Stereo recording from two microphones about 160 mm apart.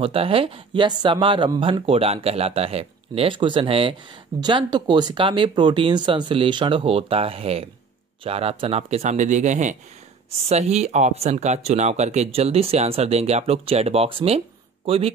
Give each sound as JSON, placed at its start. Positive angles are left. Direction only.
{"t": 0.0, "sound": "speech", "side_deg": -35}